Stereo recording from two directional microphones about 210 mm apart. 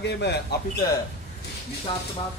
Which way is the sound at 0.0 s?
55° left (ahead or behind).